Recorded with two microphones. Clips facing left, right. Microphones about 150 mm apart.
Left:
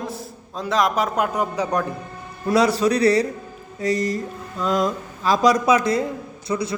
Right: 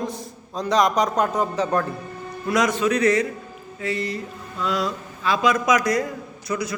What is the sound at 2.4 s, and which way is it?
A man's voice, 35° left (ahead or behind).